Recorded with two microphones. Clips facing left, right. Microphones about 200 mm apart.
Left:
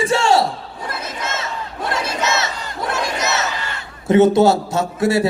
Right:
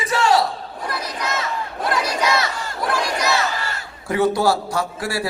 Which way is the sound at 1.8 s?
25° left (ahead or behind).